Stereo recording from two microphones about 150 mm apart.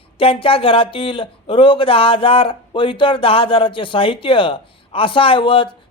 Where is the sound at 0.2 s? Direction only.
35° left (ahead or behind).